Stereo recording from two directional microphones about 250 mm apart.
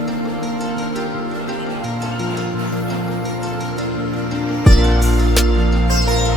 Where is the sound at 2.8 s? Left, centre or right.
Centre.